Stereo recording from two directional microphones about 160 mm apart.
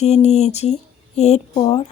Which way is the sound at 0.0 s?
45° left (ahead or behind).